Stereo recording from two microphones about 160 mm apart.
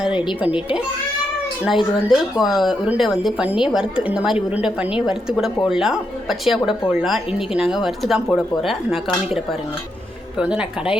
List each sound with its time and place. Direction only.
0.1 s speech: 30° left (ahead or behind)
1.6 s a woman's voice: 5° right (ahead or behind)
10.3 s speech: 5° right (ahead or behind)